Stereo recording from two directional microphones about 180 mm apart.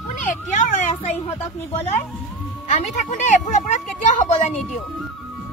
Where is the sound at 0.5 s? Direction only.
40° left (ahead or behind).